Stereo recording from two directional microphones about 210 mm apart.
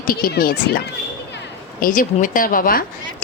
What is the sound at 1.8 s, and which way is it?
Speech, 40° left (ahead or behind).